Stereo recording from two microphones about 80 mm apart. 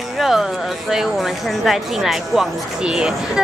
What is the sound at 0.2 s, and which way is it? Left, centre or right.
Speech, centre.